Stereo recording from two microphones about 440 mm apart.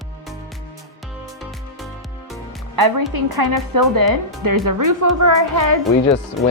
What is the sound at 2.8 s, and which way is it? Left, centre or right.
A woman's voice, right.